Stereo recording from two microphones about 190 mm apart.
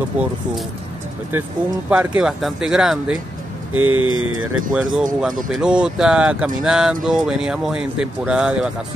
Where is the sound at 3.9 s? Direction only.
90° right.